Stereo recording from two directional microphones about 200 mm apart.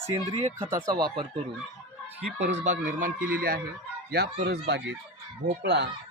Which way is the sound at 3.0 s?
45° right (ahead or behind).